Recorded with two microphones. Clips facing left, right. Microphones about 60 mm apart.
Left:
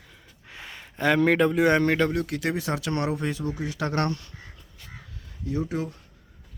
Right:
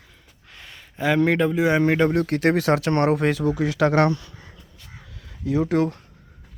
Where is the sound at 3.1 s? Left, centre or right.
Right.